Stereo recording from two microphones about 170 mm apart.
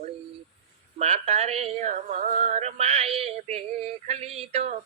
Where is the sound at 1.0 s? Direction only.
40° right (ahead or behind).